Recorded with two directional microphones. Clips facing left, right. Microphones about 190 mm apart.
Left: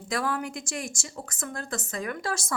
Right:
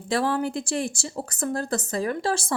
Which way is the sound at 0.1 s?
30° right (ahead or behind).